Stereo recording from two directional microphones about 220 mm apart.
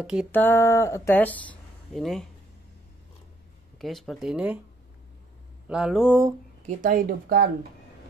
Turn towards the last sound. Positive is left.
turn(degrees=-45)  # may be behind; listen again after turning